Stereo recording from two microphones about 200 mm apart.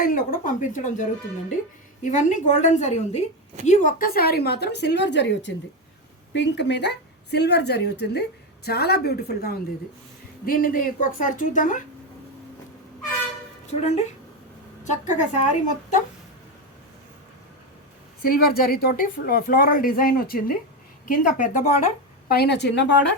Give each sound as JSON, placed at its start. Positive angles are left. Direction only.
{"t": 0.0, "sound": "a woman's voice", "side_deg": 45}
{"t": 13.7, "sound": "a woman's voice", "side_deg": 35}
{"t": 18.2, "sound": "a woman's voice", "side_deg": 50}
{"t": 22.3, "sound": "a woman's voice", "side_deg": 55}